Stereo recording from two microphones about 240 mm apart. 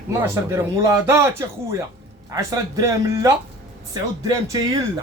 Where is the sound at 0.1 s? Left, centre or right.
Centre.